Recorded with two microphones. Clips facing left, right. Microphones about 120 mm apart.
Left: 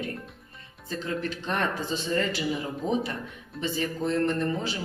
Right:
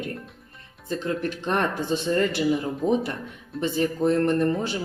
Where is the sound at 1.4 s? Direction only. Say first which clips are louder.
Right 5 dB; 55° right (ahead or behind).